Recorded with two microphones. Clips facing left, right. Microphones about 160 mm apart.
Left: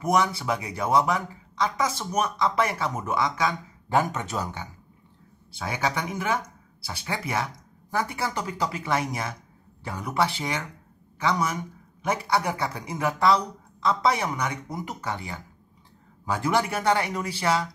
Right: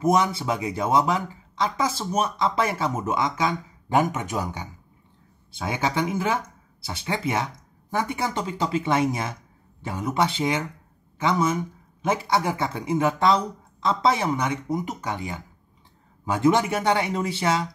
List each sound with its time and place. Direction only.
0.0 s speech: 25° right (ahead or behind)